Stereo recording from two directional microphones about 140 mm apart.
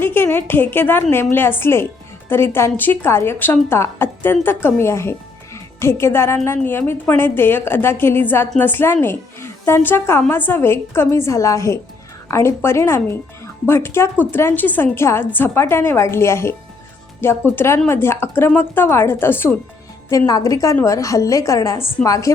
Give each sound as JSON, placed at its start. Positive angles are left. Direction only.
{"t": 0.0, "sound": "a woman's voice", "side_deg": 15}